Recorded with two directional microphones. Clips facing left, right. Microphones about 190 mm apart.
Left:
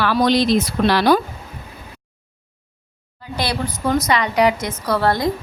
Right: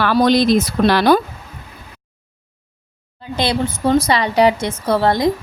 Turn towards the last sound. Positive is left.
turn(degrees=-20)  # may be behind; listen again after turning